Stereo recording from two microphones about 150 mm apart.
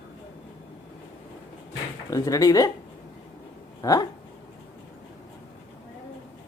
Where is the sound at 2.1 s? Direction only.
25° left (ahead or behind).